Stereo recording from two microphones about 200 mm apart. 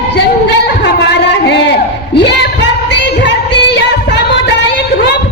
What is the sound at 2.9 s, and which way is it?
Music, 60° left (ahead or behind).